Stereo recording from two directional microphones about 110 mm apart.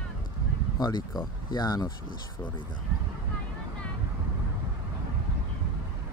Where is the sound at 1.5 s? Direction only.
40° left (ahead or behind).